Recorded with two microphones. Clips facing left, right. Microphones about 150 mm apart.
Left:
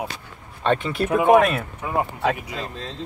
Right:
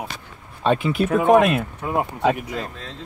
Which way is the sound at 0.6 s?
5° right (ahead or behind).